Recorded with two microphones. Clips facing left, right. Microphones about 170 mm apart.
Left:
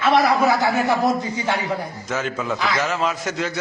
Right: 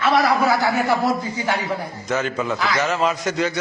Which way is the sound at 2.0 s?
Centre (ahead or behind).